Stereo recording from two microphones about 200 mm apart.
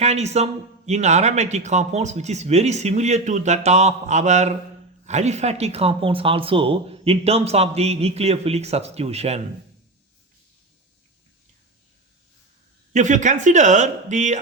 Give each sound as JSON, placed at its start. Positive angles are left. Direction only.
{"t": 0.0, "sound": "speech", "side_deg": -35}
{"t": 12.9, "sound": "speech", "side_deg": -35}